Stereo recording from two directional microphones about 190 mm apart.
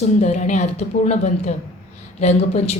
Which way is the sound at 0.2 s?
40° left (ahead or behind).